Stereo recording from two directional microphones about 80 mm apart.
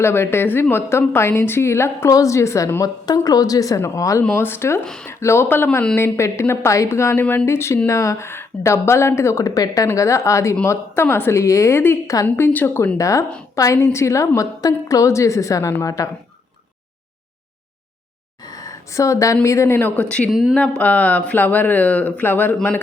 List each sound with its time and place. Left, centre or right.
0.0 s a woman's voice: left
3.2 s speech: left
4.4 s a woman's voice: left
12.5 s speech: left
13.0 s a woman's voice: left
18.4 s speech: left
19.9 s speech: centre
20.3 s speech: centre
20.6 s speech: centre